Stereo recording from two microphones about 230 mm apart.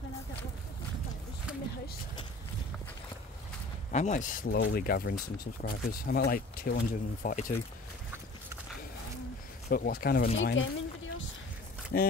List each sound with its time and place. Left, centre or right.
3.9 s speech: left
9.7 s speech: left
10.3 s speech: left
11.9 s speech: left